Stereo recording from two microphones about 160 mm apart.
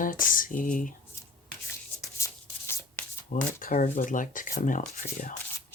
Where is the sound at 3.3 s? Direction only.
55° left (ahead or behind).